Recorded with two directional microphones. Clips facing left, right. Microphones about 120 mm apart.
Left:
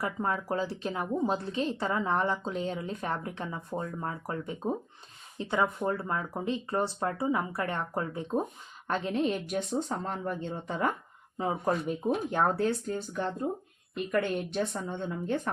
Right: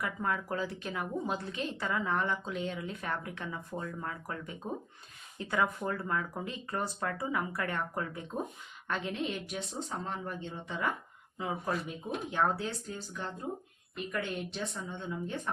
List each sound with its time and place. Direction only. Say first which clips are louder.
0.0 s a woman's voice: left 3 dB; 30° left (ahead or behind)
12.0 s speech: left 4 dB; 50° left (ahead or behind)